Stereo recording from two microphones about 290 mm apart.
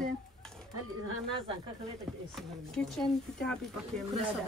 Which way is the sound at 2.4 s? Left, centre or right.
Centre.